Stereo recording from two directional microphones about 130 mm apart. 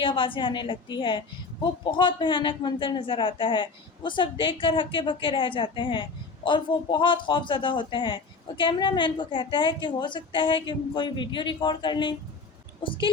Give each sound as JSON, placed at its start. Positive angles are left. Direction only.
{"t": 0.0, "sound": "a woman's voice", "side_deg": 40}